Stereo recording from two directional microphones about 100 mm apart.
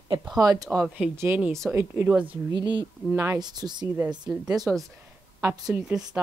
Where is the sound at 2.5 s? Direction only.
50° right (ahead or behind).